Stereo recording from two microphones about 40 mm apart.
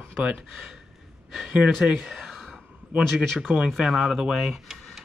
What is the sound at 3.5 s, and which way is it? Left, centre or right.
Speech, right.